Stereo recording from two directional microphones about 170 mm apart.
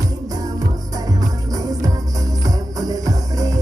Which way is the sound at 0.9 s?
20° right (ahead or behind).